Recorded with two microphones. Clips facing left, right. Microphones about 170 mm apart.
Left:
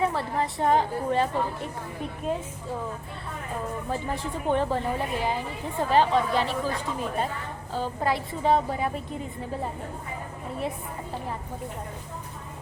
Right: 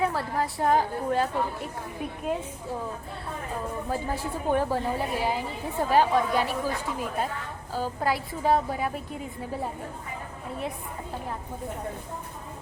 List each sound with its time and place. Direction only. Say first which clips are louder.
0.0 s a woman's voice: left 1 dB; centre (ahead or behind)
3.8 s a woman's voice: even; 5° right (ahead or behind)